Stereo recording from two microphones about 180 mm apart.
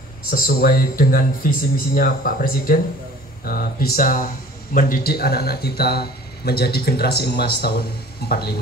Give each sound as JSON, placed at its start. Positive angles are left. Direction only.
{"t": 0.3, "sound": "speech", "side_deg": 55}